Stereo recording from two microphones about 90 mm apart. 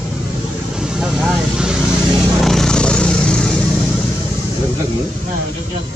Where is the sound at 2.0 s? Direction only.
5° left (ahead or behind).